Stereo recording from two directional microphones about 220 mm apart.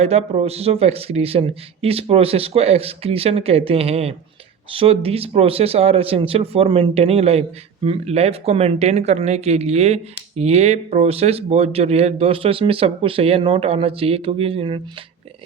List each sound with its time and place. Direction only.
0.0 s speech: 30° right (ahead or behind)